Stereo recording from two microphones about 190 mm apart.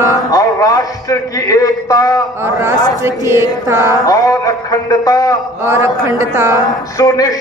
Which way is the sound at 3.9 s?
20° left (ahead or behind).